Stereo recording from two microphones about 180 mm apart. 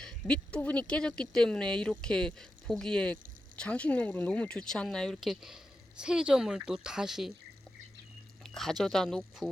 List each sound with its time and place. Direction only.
0.0 s speech: 5° left (ahead or behind)
8.4 s a sound: centre (ahead or behind)
8.8 s speech: centre (ahead or behind)